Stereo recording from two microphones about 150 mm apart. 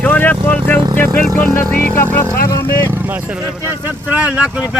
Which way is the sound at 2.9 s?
10° right (ahead or behind).